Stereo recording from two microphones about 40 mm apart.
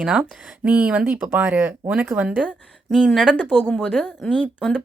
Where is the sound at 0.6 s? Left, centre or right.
Right.